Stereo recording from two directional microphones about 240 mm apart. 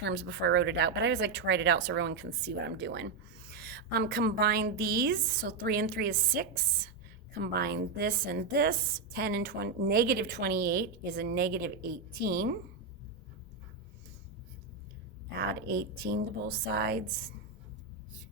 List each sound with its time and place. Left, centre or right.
0.0 s a woman's voice: right
15.4 s a woman's voice: right